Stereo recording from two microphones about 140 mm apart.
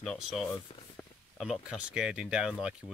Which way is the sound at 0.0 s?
5° left (ahead or behind).